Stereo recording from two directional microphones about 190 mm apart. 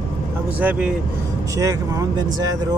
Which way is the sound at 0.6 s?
5° right (ahead or behind).